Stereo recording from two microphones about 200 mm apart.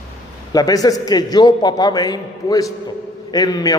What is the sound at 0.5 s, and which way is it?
A man's voice, 20° left (ahead or behind).